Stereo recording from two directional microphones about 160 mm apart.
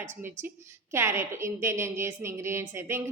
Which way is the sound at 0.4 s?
15° right (ahead or behind).